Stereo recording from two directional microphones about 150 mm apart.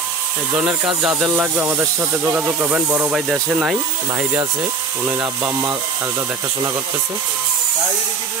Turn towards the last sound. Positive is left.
turn(degrees=-20)  # may be behind; listen again after turning